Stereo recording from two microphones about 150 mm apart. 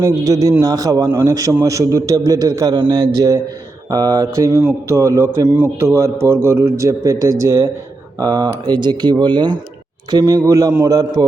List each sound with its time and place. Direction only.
0.0 s a man's voice: 25° right (ahead or behind)